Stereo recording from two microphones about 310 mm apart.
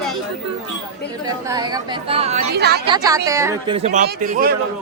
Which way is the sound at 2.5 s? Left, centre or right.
Right.